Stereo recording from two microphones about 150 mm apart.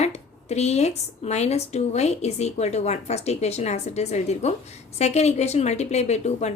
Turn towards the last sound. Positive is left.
turn(degrees=50)  # may be behind; listen again after turning